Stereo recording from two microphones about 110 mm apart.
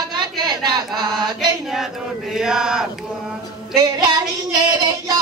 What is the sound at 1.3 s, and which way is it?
Chant, 45° right (ahead or behind).